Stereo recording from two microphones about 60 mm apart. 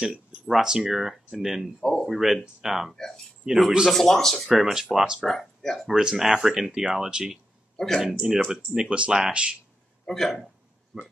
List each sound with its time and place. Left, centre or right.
0.0 s speech: centre
1.8 s speech: centre
2.0 s speech: centre
4.5 s speech: centre
5.2 s speech: centre
5.9 s speech: centre
7.7 s a sound: centre
8.1 s speech: centre
10.0 s speech: centre